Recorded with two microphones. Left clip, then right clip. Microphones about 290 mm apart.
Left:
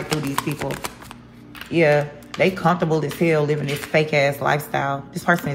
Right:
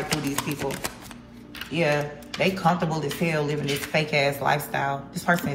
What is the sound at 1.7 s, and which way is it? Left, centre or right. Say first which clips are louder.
Speech: left 7 dB; left.